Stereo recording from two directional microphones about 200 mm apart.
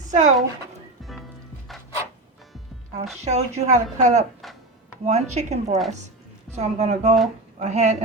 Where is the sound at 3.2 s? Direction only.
35° right (ahead or behind).